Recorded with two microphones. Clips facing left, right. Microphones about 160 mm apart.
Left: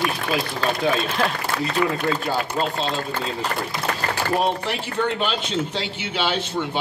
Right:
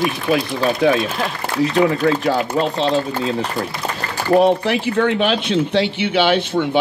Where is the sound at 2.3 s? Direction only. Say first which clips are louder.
Right 6 dB; 70° right (ahead or behind).